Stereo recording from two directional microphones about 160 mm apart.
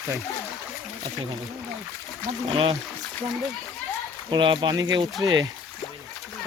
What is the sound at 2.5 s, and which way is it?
Speech, 30° right (ahead or behind).